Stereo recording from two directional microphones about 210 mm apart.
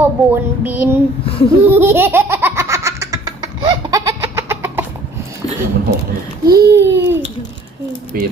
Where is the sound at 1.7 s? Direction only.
10° right (ahead or behind).